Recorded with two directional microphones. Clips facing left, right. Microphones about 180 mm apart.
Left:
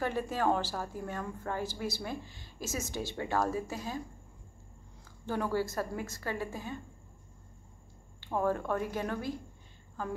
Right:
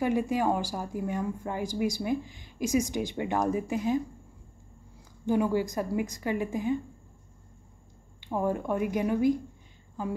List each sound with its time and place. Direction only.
0.0 s a woman's voice: 15° right (ahead or behind)
5.2 s a woman's voice: 15° right (ahead or behind)
8.2 s a woman's voice: 15° right (ahead or behind)